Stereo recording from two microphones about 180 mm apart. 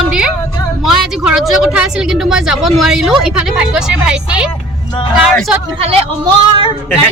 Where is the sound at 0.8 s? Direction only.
Centre (ahead or behind).